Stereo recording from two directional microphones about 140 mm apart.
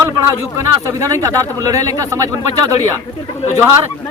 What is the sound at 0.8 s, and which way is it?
Speech, 20° right (ahead or behind).